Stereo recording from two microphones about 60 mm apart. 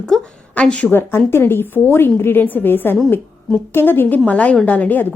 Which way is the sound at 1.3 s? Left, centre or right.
Left.